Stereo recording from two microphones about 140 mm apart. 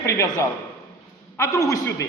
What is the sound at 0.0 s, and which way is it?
A man's voice, 20° left (ahead or behind).